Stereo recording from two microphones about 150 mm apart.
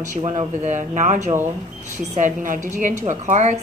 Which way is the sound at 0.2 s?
45° right (ahead or behind).